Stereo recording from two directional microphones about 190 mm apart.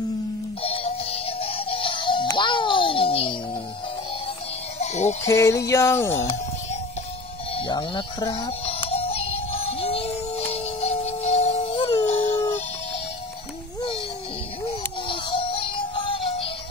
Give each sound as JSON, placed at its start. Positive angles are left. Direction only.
{"t": 0.6, "sound": "music", "side_deg": 30}
{"t": 4.7, "sound": "a sound", "side_deg": 35}
{"t": 5.3, "sound": "music", "side_deg": 15}
{"t": 7.5, "sound": "music", "side_deg": 25}
{"t": 14.7, "sound": "music", "side_deg": 25}